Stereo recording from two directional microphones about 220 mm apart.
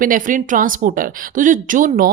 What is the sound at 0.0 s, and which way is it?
A woman's voice, 40° right (ahead or behind).